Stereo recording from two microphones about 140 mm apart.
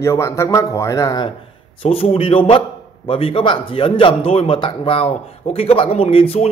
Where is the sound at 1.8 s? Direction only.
45° left (ahead or behind).